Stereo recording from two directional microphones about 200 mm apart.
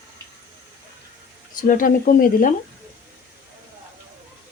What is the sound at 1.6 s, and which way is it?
Speech, 40° left (ahead or behind).